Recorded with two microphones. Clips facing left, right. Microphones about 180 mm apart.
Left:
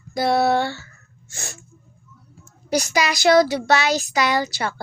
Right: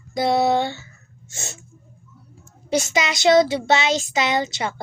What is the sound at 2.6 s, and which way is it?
Speech, 25° right (ahead or behind).